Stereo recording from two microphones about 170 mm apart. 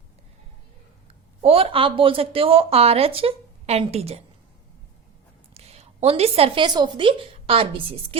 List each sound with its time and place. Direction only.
1.4 s speech: 35° right (ahead or behind)
5.5 s a woman's voice: 40° right (ahead or behind)